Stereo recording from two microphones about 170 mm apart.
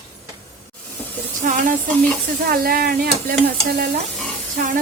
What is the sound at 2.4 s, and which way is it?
Speech, 60° right (ahead or behind).